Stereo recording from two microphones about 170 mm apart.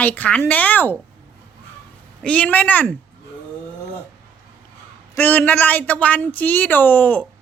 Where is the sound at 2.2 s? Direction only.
5° left (ahead or behind).